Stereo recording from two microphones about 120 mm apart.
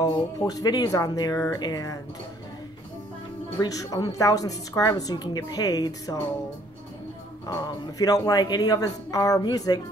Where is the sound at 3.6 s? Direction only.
30° left (ahead or behind).